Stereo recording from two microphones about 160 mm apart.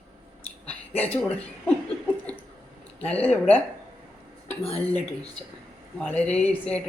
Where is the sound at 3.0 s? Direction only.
10° left (ahead or behind).